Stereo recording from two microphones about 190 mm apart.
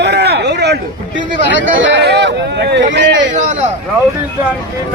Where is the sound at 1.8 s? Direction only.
65° right (ahead or behind).